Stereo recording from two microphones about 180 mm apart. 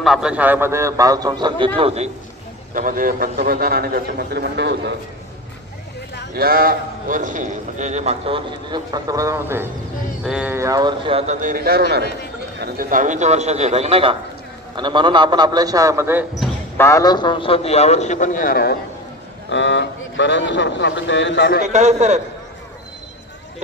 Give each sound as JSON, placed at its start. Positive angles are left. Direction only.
{"t": 0.0, "sound": "a man's voice", "side_deg": -5}
{"t": 2.7, "sound": "a man's voice", "side_deg": -50}
{"t": 6.3, "sound": "a man's voice", "side_deg": -55}
{"t": 16.7, "sound": "a man's voice", "side_deg": 15}
{"t": 19.5, "sound": "speech", "side_deg": 90}
{"t": 21.6, "sound": "a man's voice", "side_deg": -40}